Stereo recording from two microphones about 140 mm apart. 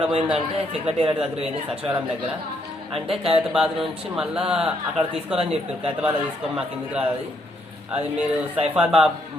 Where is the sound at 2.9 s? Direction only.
45° right (ahead or behind).